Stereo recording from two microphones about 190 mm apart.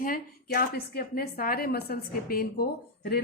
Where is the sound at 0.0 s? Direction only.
50° left (ahead or behind).